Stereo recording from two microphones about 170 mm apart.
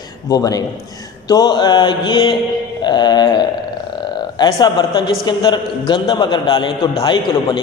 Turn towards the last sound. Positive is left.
turn(degrees=25)  # may be behind; listen again after turning